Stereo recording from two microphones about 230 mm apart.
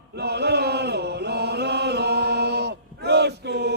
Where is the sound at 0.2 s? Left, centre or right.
Right.